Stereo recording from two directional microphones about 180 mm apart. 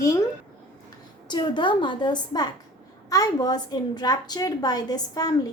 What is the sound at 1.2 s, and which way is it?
A woman's voice, 25° left (ahead or behind).